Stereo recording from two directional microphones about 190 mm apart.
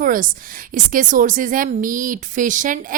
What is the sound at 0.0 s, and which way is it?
A woman's voice, 45° right (ahead or behind).